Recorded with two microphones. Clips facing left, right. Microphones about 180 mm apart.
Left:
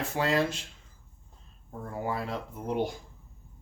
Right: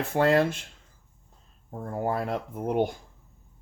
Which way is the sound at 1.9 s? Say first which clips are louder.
Right 5 dB; 50° right (ahead or behind).